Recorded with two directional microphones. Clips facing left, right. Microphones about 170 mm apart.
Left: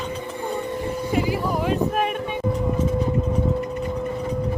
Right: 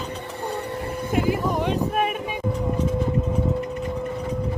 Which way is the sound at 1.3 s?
Centre (ahead or behind).